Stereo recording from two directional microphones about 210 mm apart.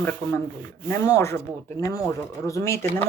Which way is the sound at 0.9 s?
15° left (ahead or behind).